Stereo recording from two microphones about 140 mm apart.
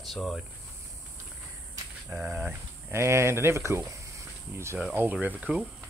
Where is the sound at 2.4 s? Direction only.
15° right (ahead or behind).